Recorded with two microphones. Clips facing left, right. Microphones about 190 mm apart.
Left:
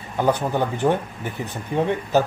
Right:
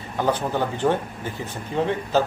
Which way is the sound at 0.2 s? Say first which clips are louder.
Left 2 dB; 15° left (ahead or behind).